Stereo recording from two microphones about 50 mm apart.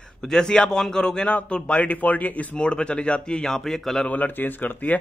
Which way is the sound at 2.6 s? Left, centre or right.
Left.